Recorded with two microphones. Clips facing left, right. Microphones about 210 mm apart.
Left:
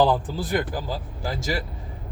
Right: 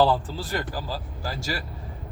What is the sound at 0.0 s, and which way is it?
Speech, 15° left (ahead or behind).